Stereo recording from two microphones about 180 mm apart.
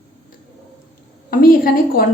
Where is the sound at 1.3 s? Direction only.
55° left (ahead or behind).